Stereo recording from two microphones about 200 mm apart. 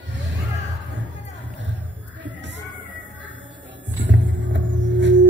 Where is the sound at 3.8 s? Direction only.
65° right (ahead or behind).